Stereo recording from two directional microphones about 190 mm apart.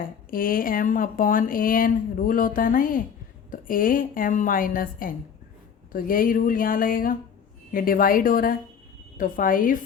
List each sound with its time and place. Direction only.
0.0 s speech: 50° left (ahead or behind)